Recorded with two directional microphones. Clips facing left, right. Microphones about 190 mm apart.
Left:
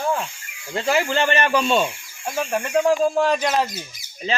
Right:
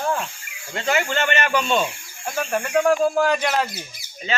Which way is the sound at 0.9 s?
35° left (ahead or behind).